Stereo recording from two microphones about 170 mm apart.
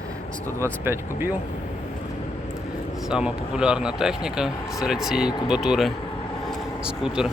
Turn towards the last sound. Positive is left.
turn(degrees=-5)  # may be behind; listen again after turning